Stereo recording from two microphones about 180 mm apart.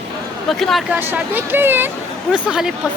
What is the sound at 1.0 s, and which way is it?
A woman's voice, 10° right (ahead or behind).